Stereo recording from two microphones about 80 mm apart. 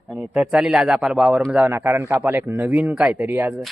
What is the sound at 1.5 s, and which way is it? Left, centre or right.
Speech, centre.